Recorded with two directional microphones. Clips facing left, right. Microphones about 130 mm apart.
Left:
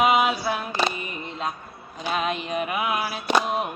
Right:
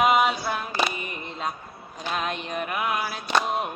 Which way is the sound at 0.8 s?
15° right (ahead or behind).